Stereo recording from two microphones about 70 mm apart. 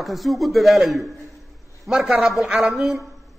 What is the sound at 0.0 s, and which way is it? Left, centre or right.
A man's voice, centre.